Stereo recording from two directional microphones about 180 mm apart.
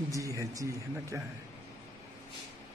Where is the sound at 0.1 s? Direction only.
20° right (ahead or behind).